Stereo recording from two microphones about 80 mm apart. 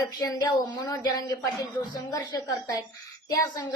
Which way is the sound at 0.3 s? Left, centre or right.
Left.